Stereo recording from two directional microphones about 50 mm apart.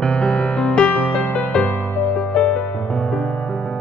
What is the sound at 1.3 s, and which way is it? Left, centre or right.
Music, left.